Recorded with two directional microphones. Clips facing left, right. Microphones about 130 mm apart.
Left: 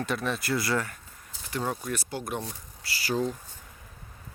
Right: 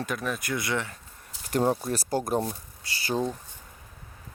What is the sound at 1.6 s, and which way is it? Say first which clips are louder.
Speech: right 5 dB; 30° right (ahead or behind).